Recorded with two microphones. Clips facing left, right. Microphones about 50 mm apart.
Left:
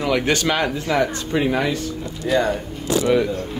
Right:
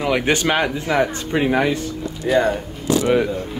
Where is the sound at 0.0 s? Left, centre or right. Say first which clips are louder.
Right 1 dB; centre.